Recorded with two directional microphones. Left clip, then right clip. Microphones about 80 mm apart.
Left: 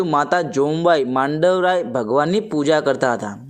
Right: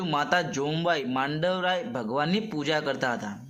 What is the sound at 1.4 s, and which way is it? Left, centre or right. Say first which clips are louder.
Speech: left 12 dB; left.